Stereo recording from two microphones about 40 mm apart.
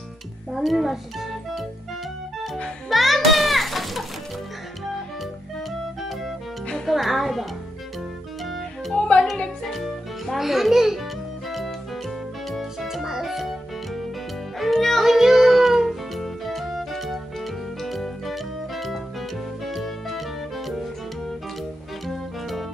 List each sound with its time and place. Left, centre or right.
0.5 s speech: centre
2.9 s music: centre
6.9 s speech: centre
8.9 s music: left
9.7 s a child's voice: centre
12.8 s music: centre
15.0 s music: centre
22.0 s music: centre